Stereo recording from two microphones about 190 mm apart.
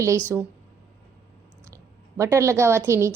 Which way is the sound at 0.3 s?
10° right (ahead or behind).